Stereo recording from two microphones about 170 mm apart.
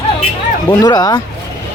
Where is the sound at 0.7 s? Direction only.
25° left (ahead or behind).